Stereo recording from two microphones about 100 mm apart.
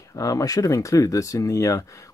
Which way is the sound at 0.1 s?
35° left (ahead or behind).